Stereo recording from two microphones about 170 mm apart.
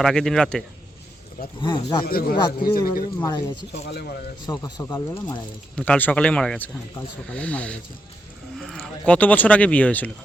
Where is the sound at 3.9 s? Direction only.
75° left (ahead or behind).